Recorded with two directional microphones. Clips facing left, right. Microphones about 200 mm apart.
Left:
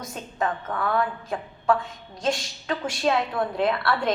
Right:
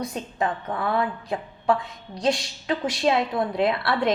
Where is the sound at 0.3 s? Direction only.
25° right (ahead or behind).